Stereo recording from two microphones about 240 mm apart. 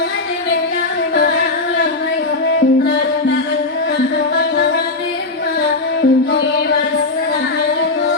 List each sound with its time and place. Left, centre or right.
4.4 s music: left
6.0 s music: left